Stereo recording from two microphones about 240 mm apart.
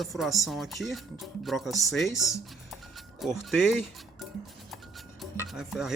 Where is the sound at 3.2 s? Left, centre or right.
Centre.